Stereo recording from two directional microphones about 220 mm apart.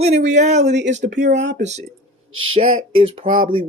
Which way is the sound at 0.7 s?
50° right (ahead or behind).